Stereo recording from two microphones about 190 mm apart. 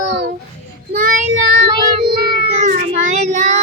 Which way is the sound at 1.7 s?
25° right (ahead or behind).